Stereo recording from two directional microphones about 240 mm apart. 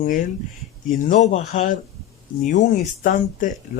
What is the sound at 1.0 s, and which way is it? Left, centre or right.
Speech, left.